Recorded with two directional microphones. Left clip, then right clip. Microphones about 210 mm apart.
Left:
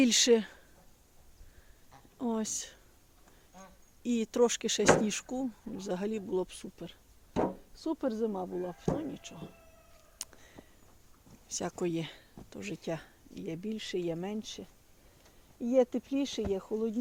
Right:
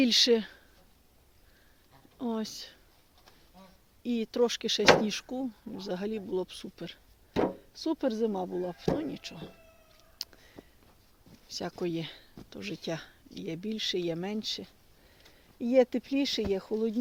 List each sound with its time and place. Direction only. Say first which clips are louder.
0.0 s speech: right 1 dB; centre (ahead or behind)
2.1 s speech: left 1 dB; centre (ahead or behind)
4.0 s speech: even; 5° left (ahead or behind)
6.7 s speech: right 4 dB; 15° right (ahead or behind)
10.2 s a sound: right 5 dB; 5° left (ahead or behind)
11.5 s speech: even; 5° left (ahead or behind); by 16.9 s 20° right (ahead or behind)